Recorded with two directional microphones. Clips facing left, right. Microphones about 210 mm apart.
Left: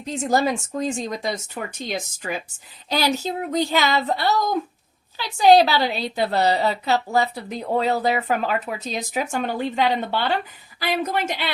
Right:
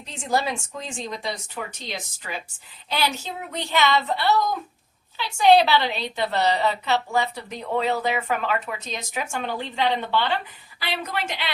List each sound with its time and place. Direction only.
0.0 s a woman's voice: 45° left (ahead or behind)